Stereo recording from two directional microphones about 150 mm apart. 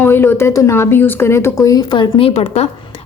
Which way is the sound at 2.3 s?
45° left (ahead or behind).